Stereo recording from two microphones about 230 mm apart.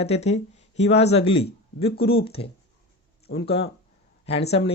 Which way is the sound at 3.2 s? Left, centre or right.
Left.